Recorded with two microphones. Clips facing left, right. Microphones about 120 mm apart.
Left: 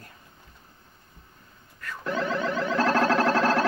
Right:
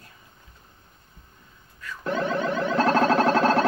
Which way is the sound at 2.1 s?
25° right (ahead or behind).